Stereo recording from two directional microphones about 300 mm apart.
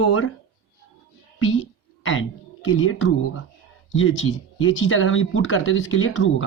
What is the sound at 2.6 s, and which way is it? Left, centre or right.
Speech, left.